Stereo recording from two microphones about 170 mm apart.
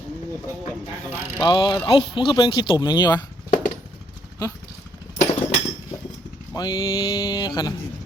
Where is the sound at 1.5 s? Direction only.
25° left (ahead or behind).